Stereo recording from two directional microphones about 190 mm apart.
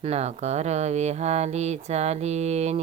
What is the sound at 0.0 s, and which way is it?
Speech, 35° right (ahead or behind).